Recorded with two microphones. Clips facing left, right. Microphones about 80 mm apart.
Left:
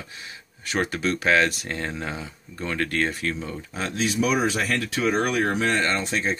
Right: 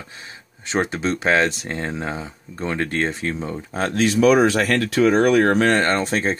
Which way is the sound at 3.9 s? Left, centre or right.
Right.